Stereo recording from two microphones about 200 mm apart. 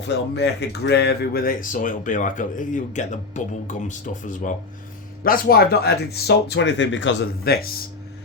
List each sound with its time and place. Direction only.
0.3 s speech: 55° left (ahead or behind)